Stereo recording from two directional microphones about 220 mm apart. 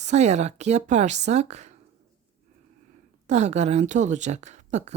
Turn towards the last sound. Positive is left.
turn(degrees=-30)  # may be behind; listen again after turning